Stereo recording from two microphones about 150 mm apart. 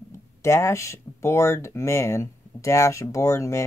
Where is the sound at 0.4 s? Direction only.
20° left (ahead or behind).